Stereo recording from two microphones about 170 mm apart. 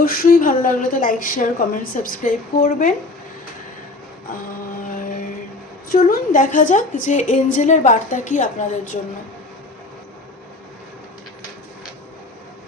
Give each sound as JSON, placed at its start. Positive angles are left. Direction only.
{"t": 0.0, "sound": "a woman's voice", "side_deg": 60}
{"t": 5.9, "sound": "a woman's voice", "side_deg": 55}